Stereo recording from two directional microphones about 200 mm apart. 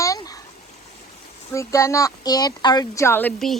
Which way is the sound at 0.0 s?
15° left (ahead or behind).